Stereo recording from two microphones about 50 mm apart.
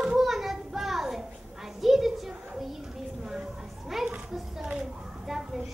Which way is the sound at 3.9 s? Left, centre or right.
Centre.